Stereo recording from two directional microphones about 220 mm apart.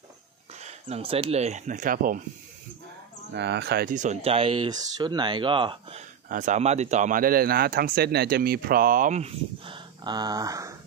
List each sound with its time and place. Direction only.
0.6 s speech: 30° right (ahead or behind)
3.3 s speech: 50° right (ahead or behind); by 6.0 s 25° right (ahead or behind)
6.2 s speech: 35° right (ahead or behind); by 10.8 s 15° right (ahead or behind)